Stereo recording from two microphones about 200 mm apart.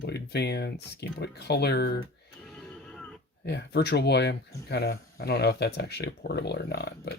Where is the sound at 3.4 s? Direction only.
55° left (ahead or behind).